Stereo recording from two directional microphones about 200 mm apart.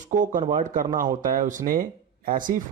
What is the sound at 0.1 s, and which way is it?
Speech, 40° right (ahead or behind).